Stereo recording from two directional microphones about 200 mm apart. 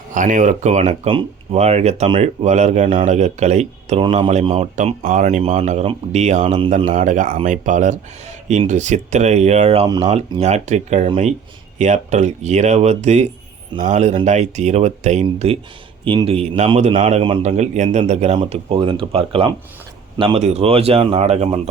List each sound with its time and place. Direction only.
0.1 s speech: 40° right (ahead or behind)
6.9 s a man's voice: 40° right (ahead or behind)